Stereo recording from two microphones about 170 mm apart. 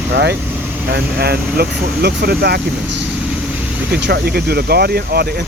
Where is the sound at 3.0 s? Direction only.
10° right (ahead or behind).